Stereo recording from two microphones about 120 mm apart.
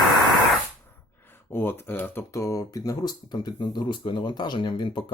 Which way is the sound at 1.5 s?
20° left (ahead or behind).